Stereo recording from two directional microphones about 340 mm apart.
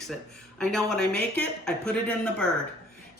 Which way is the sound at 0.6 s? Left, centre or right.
Centre.